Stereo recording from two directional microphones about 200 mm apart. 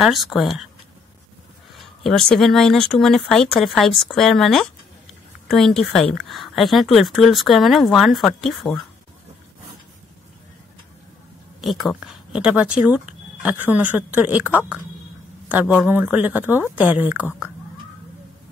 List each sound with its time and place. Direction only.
0.0 s a woman's voice: centre (ahead or behind)
1.8 s a woman's voice: centre (ahead or behind)
11.6 s speech: centre (ahead or behind)
15.7 s speech: 5° right (ahead or behind)